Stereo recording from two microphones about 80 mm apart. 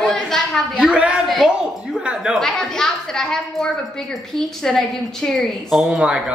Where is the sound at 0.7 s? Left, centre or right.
Centre.